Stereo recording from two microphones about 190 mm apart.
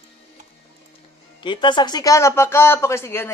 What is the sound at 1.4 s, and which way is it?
Speech, 25° left (ahead or behind).